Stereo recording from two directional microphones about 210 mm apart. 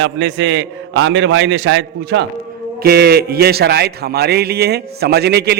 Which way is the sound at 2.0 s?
50° right (ahead or behind).